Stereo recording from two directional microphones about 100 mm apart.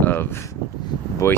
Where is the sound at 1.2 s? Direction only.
30° left (ahead or behind).